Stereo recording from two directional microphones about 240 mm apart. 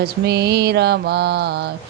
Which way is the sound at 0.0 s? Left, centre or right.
Right.